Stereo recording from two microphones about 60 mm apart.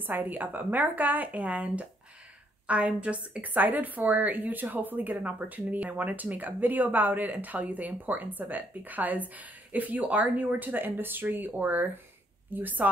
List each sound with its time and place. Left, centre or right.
0.0 s a woman's voice: right